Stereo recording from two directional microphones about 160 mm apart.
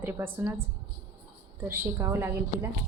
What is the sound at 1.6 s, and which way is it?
A woman's voice, 15° right (ahead or behind).